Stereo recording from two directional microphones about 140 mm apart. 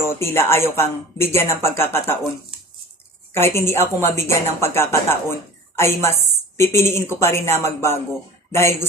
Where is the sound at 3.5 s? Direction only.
20° left (ahead or behind).